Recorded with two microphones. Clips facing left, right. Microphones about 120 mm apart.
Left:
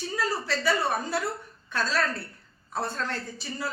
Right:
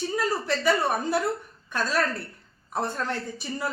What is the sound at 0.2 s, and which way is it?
A woman's voice, 15° right (ahead or behind).